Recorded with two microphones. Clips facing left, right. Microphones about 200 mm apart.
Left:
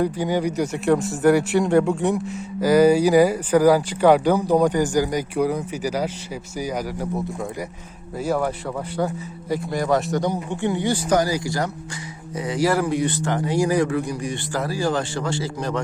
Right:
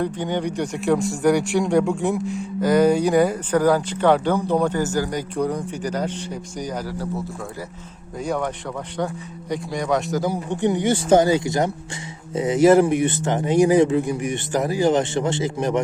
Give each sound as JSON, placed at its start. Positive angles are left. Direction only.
{"t": 0.0, "sound": "speech", "side_deg": 10}
{"t": 10.5, "sound": "speech", "side_deg": -20}